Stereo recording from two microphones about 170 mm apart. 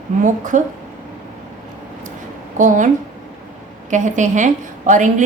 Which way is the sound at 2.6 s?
50° right (ahead or behind).